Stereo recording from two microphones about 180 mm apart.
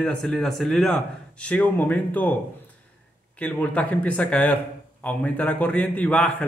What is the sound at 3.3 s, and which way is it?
A man's voice, 10° left (ahead or behind).